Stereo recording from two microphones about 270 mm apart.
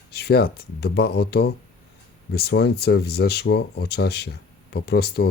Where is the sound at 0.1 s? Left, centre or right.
Left.